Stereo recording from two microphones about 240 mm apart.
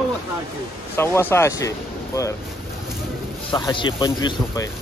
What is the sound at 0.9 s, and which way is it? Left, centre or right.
Speech, centre.